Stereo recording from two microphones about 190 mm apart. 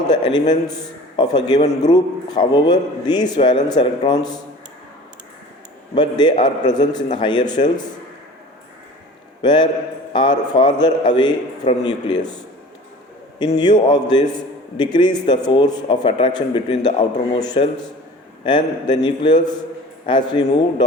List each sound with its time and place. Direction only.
0.1 s a man's voice: 25° left (ahead or behind)
5.9 s a man's voice: 20° left (ahead or behind)
9.4 s a man's voice: 25° left (ahead or behind)
13.6 s a man's voice: 20° left (ahead or behind)